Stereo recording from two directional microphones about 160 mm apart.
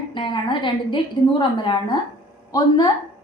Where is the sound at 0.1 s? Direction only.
30° left (ahead or behind).